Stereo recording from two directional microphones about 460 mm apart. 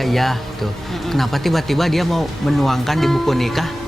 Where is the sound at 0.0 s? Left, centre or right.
Centre.